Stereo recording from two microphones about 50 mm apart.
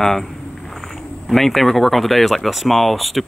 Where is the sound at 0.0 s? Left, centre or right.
Centre.